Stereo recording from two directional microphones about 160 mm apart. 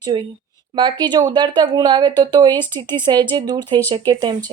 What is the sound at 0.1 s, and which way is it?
Speech, 30° right (ahead or behind).